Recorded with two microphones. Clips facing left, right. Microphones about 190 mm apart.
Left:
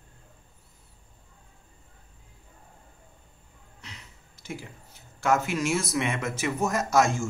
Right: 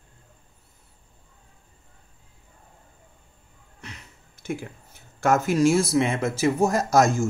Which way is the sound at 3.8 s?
55° right (ahead or behind).